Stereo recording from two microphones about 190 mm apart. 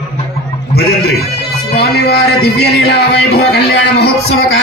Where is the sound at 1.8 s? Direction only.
55° left (ahead or behind).